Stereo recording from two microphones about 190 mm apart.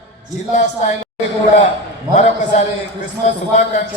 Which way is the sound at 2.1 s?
35° left (ahead or behind).